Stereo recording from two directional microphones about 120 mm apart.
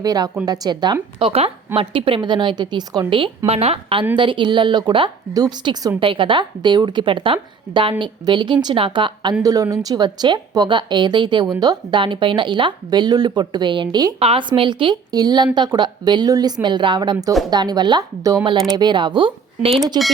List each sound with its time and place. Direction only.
0.0 s a woman's voice: 30° right (ahead or behind)
1.2 s a woman's voice: 50° right (ahead or behind); by 5.9 s 35° right (ahead or behind)
6.0 s a woman's voice: 45° right (ahead or behind)
9.4 s a woman's voice: 30° right (ahead or behind)
14.2 s a woman's voice: 50° right (ahead or behind)